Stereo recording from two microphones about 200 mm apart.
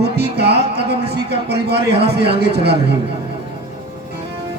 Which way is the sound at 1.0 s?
55° right (ahead or behind).